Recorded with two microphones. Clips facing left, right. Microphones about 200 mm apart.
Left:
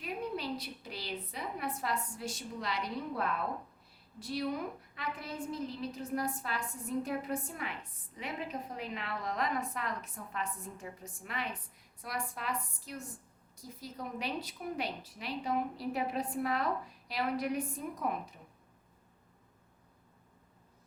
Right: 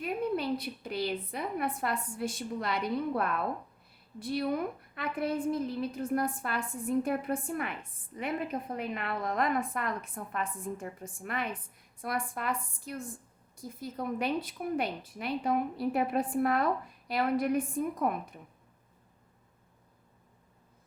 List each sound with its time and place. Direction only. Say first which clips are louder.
0.0 s a woman's voice: right 6 dB; 55° right (ahead or behind)